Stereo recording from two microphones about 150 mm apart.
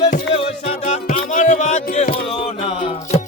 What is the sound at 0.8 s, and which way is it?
Music, 55° left (ahead or behind).